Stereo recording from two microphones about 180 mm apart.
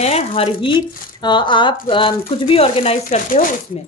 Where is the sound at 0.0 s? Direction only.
35° left (ahead or behind).